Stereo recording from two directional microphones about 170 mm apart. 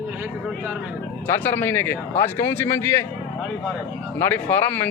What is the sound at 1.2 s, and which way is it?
A man's voice, 10° left (ahead or behind).